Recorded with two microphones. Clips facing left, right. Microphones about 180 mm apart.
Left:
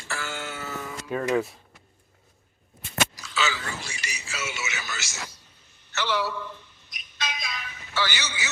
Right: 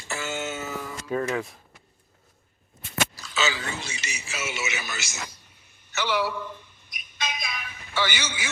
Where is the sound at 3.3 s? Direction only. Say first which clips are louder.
Right 1 dB; 20° right (ahead or behind).